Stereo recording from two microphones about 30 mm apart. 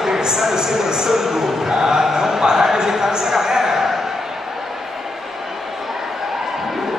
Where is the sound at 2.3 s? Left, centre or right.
Centre.